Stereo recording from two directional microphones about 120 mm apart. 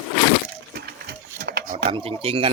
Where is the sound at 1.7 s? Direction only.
50° right (ahead or behind).